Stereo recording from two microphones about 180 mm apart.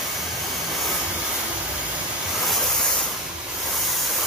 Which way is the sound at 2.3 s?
Centre (ahead or behind).